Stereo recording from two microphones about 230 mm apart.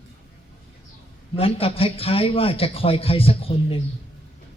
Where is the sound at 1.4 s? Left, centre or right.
Left.